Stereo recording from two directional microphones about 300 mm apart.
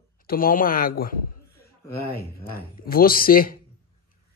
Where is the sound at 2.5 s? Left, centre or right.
Left.